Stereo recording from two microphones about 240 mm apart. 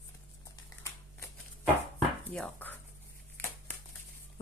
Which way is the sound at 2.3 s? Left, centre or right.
Centre.